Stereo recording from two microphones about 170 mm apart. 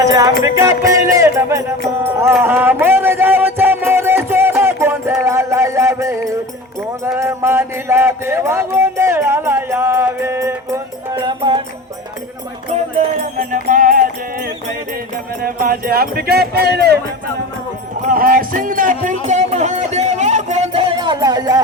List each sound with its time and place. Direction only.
0.0 s music: 20° right (ahead or behind)
12.7 s music: 45° right (ahead or behind); by 17.0 s 70° right (ahead or behind)
18.1 s music: 60° right (ahead or behind); by 20.8 s 40° right (ahead or behind)
21.0 s music: 25° right (ahead or behind)